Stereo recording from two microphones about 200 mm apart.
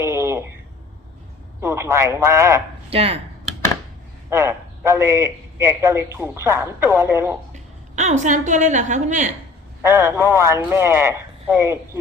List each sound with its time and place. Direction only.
0.0 s a sound: 15° right (ahead or behind)
1.6 s a man's voice: 15° right (ahead or behind)
2.9 s speech: 30° right (ahead or behind)
4.3 s a man's voice: 15° right (ahead or behind)
7.5 s a woman's voice: 35° right (ahead or behind)
9.8 s a man's voice: 15° right (ahead or behind)